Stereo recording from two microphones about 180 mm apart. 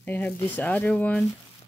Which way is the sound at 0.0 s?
10° left (ahead or behind).